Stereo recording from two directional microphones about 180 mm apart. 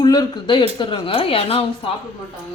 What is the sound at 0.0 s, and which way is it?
A man's voice, 20° left (ahead or behind).